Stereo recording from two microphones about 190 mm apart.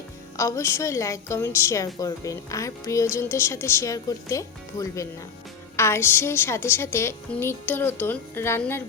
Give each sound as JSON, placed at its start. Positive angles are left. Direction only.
{"t": 0.3, "sound": "a woman's voice", "side_deg": 15}